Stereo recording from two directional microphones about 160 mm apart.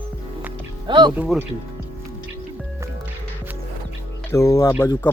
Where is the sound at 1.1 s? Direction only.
10° right (ahead or behind).